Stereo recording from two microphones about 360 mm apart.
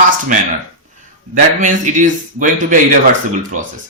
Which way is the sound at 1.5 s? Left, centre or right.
Right.